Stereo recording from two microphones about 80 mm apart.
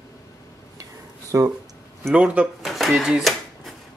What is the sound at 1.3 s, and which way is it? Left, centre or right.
Speech, right.